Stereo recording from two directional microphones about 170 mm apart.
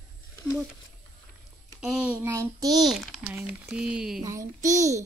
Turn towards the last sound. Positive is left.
turn(degrees=-20)  # may be behind; listen again after turning